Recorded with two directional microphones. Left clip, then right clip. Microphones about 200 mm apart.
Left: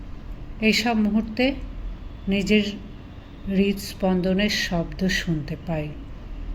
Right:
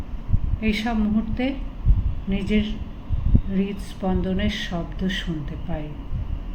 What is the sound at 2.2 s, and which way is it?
Speech, 40° left (ahead or behind).